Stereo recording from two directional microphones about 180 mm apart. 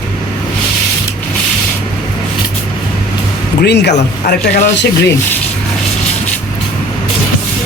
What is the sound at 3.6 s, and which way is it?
Speech, 65° left (ahead or behind).